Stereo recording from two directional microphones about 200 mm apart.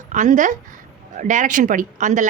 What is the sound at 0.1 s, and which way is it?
A woman's voice, 40° right (ahead or behind).